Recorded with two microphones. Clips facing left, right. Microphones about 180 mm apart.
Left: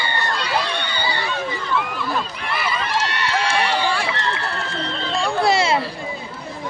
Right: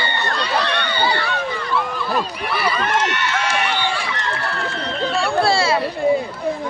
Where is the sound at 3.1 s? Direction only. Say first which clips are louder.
Even; 30° left (ahead or behind).